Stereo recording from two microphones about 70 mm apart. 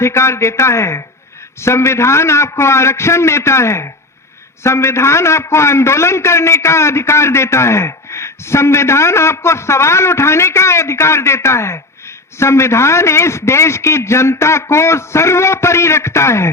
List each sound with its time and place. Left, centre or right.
0.0 s a man's voice: left